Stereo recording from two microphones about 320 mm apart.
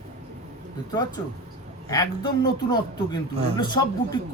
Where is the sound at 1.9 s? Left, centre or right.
Centre.